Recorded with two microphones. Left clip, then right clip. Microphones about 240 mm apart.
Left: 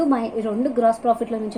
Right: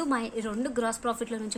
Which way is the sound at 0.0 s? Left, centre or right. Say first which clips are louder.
Left 8 dB; right.